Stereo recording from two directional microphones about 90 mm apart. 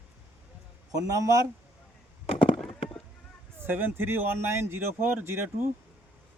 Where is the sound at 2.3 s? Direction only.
80° left.